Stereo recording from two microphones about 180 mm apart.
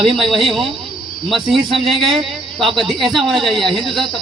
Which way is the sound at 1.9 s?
Centre (ahead or behind).